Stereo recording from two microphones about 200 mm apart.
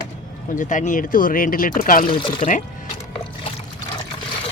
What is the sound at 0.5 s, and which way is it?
Speech, 40° left (ahead or behind).